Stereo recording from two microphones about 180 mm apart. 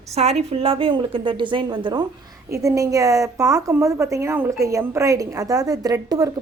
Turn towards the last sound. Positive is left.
turn(degrees=-20)  # may be behind; listen again after turning